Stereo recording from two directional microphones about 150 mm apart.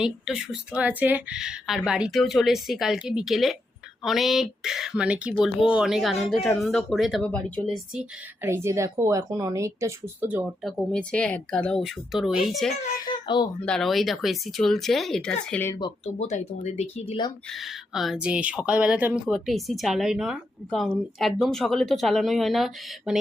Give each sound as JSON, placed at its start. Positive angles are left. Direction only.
{"t": 0.0, "sound": "a woman's voice", "side_deg": -5}
{"t": 8.4, "sound": "speech", "side_deg": -15}
{"t": 13.0, "sound": "a child's voice", "side_deg": 30}
{"t": 13.7, "sound": "a woman's voice", "side_deg": 0}
{"t": 16.1, "sound": "speech", "side_deg": 50}
{"t": 17.5, "sound": "a woman's voice", "side_deg": 0}